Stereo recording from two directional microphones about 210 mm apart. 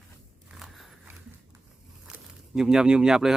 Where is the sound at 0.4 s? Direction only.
Centre (ahead or behind).